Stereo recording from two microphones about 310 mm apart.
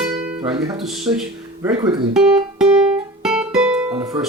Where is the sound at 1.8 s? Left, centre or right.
Centre.